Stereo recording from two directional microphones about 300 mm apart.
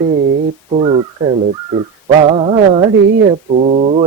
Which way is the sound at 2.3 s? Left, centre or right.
Centre.